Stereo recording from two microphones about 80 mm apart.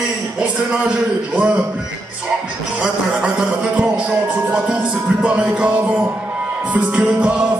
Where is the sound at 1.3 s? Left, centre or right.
Centre.